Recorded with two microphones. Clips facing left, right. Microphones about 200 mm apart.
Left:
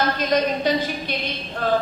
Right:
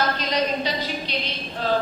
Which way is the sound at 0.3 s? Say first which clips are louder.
Left 4 dB; 50° left (ahead or behind).